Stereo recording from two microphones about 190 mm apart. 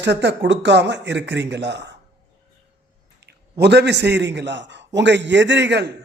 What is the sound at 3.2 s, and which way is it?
A man's voice, 60° right (ahead or behind).